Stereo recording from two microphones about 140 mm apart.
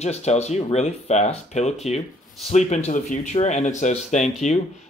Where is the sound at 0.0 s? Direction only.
50° left (ahead or behind).